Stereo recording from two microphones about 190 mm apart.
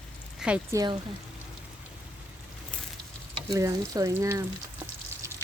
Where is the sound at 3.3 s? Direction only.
20° right (ahead or behind).